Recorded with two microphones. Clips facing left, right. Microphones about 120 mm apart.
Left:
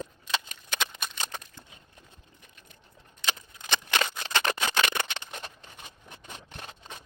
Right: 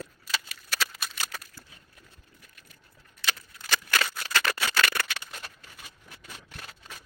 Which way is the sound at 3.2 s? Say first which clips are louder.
Even; 20° left (ahead or behind).